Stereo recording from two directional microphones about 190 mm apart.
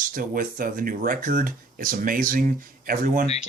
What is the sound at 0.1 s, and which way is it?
Speech, 45° right (ahead or behind).